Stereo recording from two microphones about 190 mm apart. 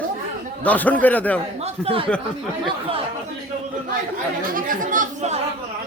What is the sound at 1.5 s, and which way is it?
Speech, 30° right (ahead or behind).